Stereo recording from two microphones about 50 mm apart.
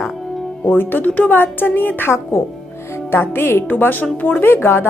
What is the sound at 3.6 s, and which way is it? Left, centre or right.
Speech, left.